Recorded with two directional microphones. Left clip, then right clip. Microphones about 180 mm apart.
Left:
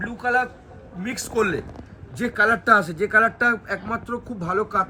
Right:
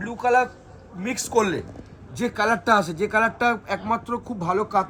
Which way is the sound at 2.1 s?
30° right (ahead or behind).